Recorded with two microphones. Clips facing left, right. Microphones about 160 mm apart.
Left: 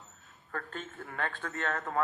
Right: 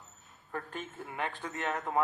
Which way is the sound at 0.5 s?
15° right (ahead or behind).